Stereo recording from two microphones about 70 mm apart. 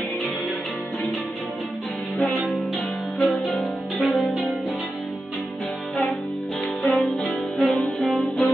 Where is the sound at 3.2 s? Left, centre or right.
Centre.